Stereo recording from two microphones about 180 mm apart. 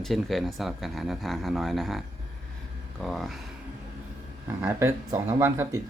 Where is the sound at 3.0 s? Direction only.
Centre (ahead or behind).